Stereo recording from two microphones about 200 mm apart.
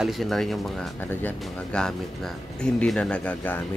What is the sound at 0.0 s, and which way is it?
Speech, centre (ahead or behind).